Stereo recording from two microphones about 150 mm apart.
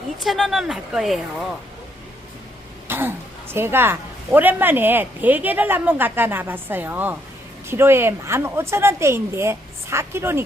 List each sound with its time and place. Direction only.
0.2 s speech: centre (ahead or behind)
2.8 s a woman's voice: 15° right (ahead or behind)